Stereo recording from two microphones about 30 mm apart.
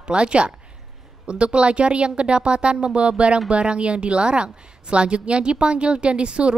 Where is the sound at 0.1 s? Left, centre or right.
Right.